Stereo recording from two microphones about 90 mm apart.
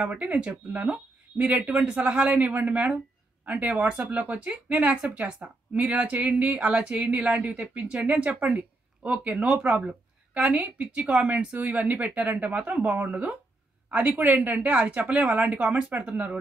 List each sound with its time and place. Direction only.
0.0 s a woman's voice: 15° right (ahead or behind)